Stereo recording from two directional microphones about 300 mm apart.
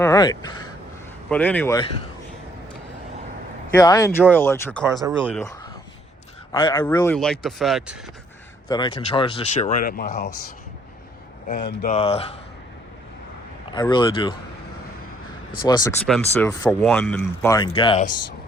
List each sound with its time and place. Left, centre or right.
0.0 s speech: centre
3.8 s speech: centre
4.9 s speech: centre
5.2 s speech: centre
8.7 s speech: centre; by 10.2 s left
11.4 s speech: left
13.7 s speech: centre
15.6 s speech: centre